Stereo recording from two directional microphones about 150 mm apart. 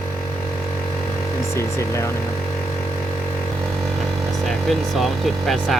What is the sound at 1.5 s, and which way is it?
Speech, 20° left (ahead or behind).